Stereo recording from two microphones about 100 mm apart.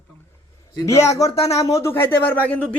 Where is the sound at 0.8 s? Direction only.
30° left (ahead or behind).